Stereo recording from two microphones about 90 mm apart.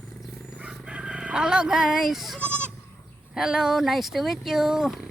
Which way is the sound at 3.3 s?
5° right (ahead or behind).